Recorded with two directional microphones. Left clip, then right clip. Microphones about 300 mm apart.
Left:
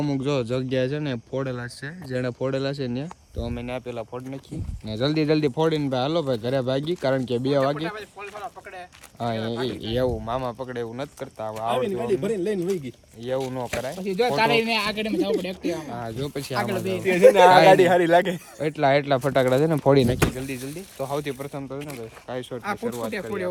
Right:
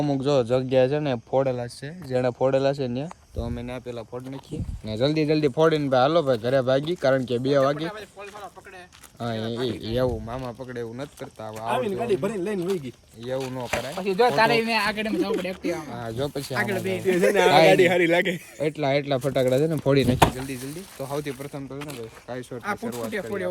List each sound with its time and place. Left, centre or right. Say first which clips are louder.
0.2 s speech: right 6 dB; centre
0.4 s speech: right 5 dB; centre